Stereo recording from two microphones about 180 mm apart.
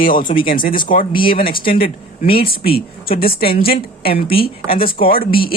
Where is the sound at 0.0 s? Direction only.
50° left (ahead or behind).